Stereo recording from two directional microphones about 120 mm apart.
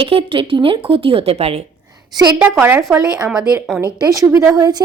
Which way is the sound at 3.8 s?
30° right (ahead or behind).